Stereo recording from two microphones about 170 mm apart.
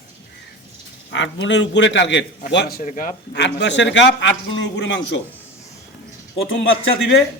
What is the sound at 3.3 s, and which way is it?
A man's voice, 90° left.